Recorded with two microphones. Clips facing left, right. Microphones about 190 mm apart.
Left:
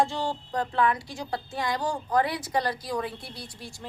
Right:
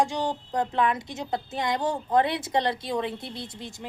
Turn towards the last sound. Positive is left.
turn(degrees=-20)  # may be behind; listen again after turning